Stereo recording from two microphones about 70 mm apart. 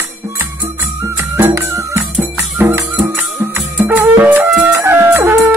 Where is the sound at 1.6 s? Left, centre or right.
Right.